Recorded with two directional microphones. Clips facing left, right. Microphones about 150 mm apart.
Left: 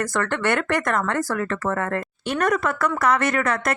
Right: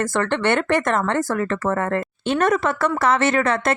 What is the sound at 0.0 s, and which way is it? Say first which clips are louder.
A woman's voice: right 3 dB; 25° right (ahead or behind).